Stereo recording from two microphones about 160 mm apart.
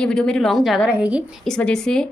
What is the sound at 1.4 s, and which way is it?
Speech, 5° left (ahead or behind).